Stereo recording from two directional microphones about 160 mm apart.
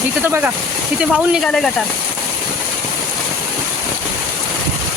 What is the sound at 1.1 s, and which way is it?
Speech, centre (ahead or behind).